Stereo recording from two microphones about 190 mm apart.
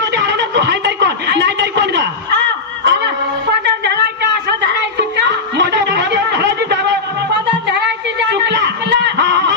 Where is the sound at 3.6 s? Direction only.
60° right (ahead or behind).